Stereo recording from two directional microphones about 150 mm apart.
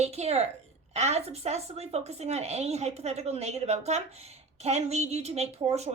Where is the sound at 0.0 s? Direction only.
45° right (ahead or behind).